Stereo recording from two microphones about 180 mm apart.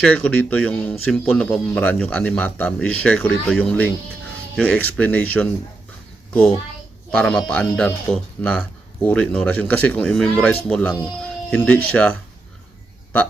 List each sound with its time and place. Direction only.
0.0 s speech: 5° left (ahead or behind)
7.2 s speech: 5° left (ahead or behind)